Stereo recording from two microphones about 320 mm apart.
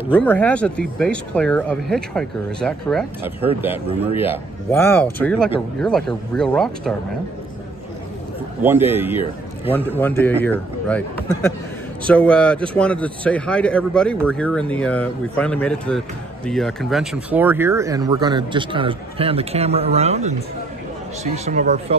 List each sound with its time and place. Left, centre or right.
0.1 s speech: centre
4.6 s speech: centre
8.6 s speech: centre
9.9 s speech: centre